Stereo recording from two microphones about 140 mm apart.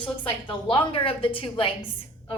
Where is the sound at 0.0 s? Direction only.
35° left (ahead or behind).